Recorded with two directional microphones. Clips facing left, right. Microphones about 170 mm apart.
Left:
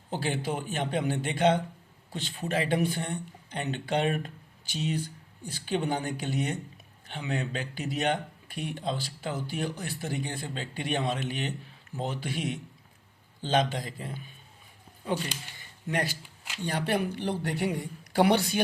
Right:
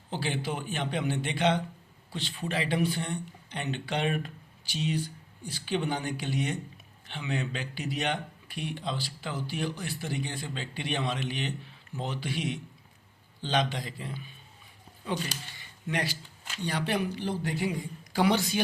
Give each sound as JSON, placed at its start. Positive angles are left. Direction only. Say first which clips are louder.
{"t": 0.1, "sound": "speech", "louder": "left 2 dB", "side_deg": 45}
{"t": 15.5, "sound": "a sound", "louder": "left 2 dB", "side_deg": 45}
{"t": 16.6, "sound": "a woman's voice", "louder": "left 1 dB", "side_deg": 50}